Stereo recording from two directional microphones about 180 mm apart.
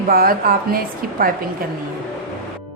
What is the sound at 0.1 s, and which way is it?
Speech, 55° right (ahead or behind).